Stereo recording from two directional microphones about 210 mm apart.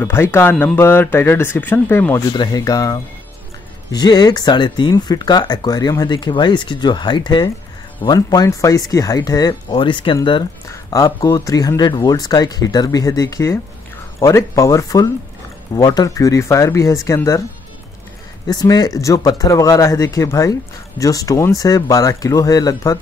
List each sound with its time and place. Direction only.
0.0 s speech: 10° left (ahead or behind)
18.5 s speech: 20° left (ahead or behind)